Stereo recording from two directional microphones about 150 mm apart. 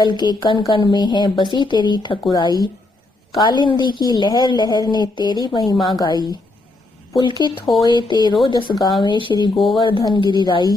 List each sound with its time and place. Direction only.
0.0 s a woman's voice: 30° left (ahead or behind)
9.8 s a woman's voice: 30° left (ahead or behind)